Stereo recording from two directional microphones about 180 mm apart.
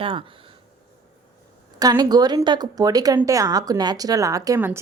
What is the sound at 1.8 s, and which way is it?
Speech, 20° right (ahead or behind).